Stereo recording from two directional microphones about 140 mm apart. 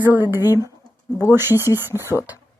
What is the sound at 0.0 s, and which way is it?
Speech, 15° right (ahead or behind).